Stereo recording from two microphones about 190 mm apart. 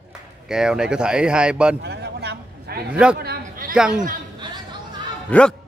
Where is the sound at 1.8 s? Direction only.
60° right (ahead or behind).